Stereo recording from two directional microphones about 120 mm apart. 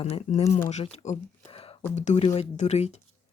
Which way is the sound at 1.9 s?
75° left (ahead or behind).